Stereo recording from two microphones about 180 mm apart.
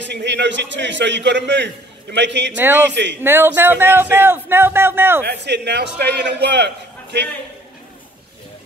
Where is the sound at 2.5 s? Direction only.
10° right (ahead or behind).